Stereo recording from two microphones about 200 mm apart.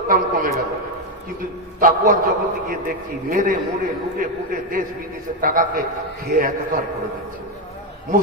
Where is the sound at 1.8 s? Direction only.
45° right (ahead or behind).